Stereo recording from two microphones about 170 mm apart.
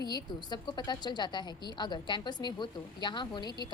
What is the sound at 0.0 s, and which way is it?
Speech, 25° left (ahead or behind).